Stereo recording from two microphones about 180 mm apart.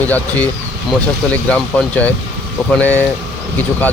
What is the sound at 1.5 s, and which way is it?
Speech, 5° left (ahead or behind).